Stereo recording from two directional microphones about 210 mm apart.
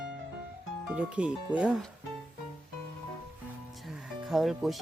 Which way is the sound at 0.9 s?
5° right (ahead or behind).